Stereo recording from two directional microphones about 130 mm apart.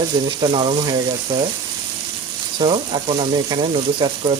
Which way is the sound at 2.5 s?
40° right (ahead or behind).